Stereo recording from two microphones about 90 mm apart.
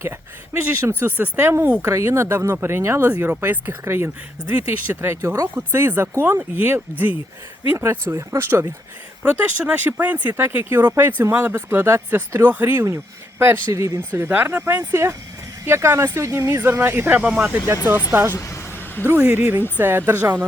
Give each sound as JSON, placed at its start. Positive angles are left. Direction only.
{"t": 0.0, "sound": "speech", "side_deg": -25}
{"t": 9.4, "sound": "speech", "side_deg": -15}
{"t": 17.2, "sound": "speech", "side_deg": -10}
{"t": 18.1, "sound": "speech", "side_deg": -20}
{"t": 18.3, "sound": "a sound", "side_deg": 35}
{"t": 19.0, "sound": "speech", "side_deg": -25}